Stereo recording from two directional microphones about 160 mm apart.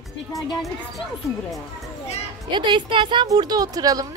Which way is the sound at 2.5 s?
30° right (ahead or behind).